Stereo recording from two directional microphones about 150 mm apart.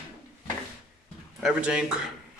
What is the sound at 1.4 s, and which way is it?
Speech, 5° right (ahead or behind).